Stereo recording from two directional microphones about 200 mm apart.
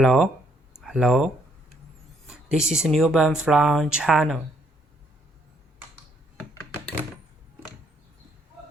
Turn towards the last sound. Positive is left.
turn(degrees=5)  # may be behind; listen again after turning